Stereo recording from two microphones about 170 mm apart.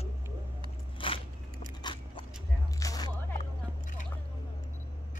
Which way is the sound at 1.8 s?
25° left (ahead or behind).